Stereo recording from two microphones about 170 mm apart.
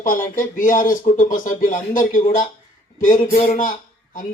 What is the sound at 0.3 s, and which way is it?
A man's voice, 50° left (ahead or behind).